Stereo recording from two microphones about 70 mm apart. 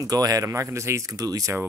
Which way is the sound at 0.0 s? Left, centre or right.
Right.